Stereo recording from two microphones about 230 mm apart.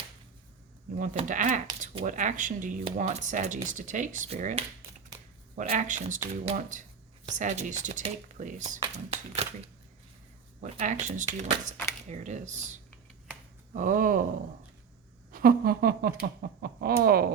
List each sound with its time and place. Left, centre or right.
0.9 s speech: right
10.6 s speech: right
15.3 s speech: right